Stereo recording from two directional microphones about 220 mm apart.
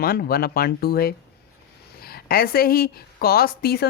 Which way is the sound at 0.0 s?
45° left (ahead or behind).